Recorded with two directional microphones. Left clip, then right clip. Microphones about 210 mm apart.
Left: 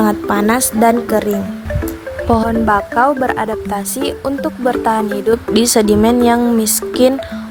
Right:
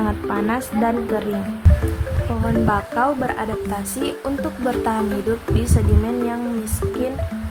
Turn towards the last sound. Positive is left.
turn(degrees=50)  # may be behind; listen again after turning